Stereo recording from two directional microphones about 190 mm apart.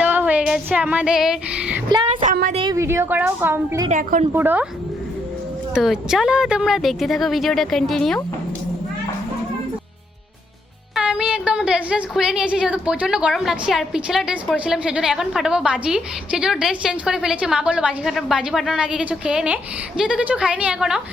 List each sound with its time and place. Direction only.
0.0 s music: 10° right (ahead or behind)
1.9 s a woman's voice: 25° right (ahead or behind)
2.2 s a sound: 50° right (ahead or behind)
2.5 s a sound: 25° right (ahead or behind)
2.7 s a woman's voice: 15° right (ahead or behind)
3.8 s a woman's voice: 40° right (ahead or behind)
4.3 s a woman's voice: 10° right (ahead or behind)
5.7 s a woman's voice: 5° right (ahead or behind)
10.9 s a woman's voice: 5° right (ahead or behind)